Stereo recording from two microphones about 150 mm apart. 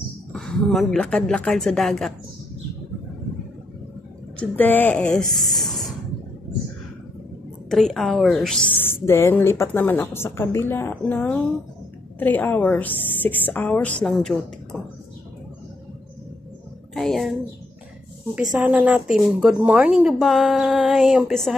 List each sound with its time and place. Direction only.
0.3 s a woman's voice: 5° left (ahead or behind)
4.4 s speech: 10° left (ahead or behind)
5.3 s a sound: centre (ahead or behind)
7.7 s a woman's voice: centre (ahead or behind)
8.7 s speech: 15° left (ahead or behind)
16.9 s a child's voice: centre (ahead or behind)
18.6 s a woman's voice: 10° right (ahead or behind)